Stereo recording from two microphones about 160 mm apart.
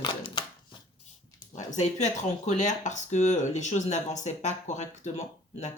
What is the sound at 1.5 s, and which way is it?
Speech, 45° left (ahead or behind).